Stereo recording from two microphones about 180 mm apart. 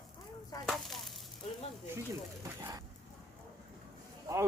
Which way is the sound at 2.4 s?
20° right (ahead or behind).